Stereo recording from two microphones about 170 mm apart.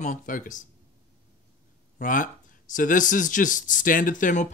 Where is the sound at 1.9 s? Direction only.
50° left (ahead or behind).